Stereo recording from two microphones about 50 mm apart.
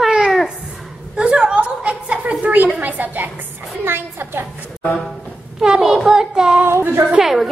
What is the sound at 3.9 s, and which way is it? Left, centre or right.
Speech, right.